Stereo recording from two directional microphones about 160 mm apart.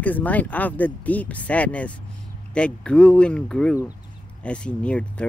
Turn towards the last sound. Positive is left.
turn(degrees=5)  # may be behind; listen again after turning